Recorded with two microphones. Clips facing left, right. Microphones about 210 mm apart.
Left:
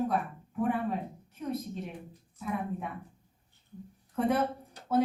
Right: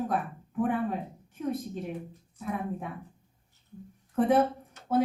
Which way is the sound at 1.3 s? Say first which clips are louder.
Right 3 dB; 50° right (ahead or behind).